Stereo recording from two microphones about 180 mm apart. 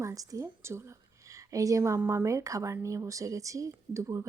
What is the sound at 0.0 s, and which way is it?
Speech, 20° right (ahead or behind).